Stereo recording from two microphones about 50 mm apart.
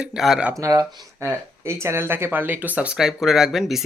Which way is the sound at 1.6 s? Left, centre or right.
Right.